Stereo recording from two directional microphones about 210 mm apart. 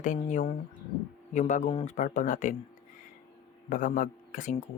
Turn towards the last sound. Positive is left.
turn(degrees=35)  # may be behind; listen again after turning